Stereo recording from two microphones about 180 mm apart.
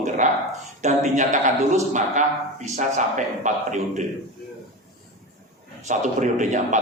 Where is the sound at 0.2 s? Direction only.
45° right (ahead or behind).